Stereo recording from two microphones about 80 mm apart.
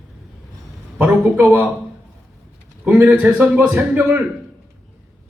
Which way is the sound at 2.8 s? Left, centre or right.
Centre.